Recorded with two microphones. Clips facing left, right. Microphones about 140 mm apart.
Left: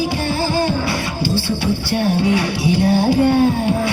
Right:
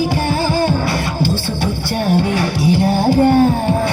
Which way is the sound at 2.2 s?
45° right (ahead or behind).